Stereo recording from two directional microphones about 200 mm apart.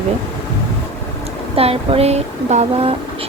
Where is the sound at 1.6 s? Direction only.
30° right (ahead or behind).